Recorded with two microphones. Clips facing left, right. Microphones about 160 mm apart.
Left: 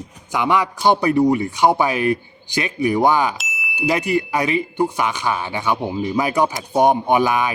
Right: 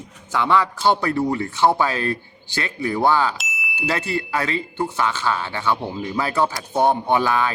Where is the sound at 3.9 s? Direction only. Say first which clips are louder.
Left 5 dB; 15° left (ahead or behind).